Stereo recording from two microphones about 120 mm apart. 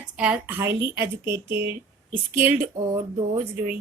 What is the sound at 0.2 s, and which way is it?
Speech, 15° right (ahead or behind).